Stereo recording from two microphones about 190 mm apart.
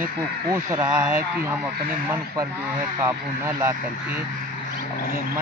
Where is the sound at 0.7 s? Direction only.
15° right (ahead or behind).